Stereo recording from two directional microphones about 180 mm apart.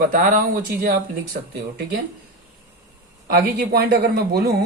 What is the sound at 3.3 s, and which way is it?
Speech, 55° right (ahead or behind).